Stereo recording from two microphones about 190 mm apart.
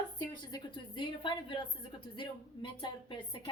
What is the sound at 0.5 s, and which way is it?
A woman's voice, 25° left (ahead or behind).